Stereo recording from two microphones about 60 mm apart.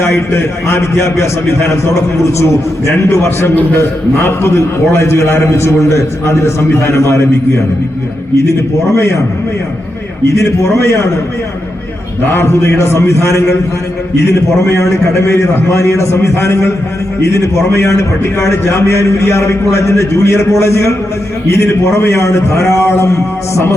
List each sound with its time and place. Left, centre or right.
0.0 s a man's voice: left
3.2 s a man's voice: left
4.2 s a man's voice: left
9.0 s a man's voice: left
10.3 s a man's voice: left
12.3 s a man's voice: left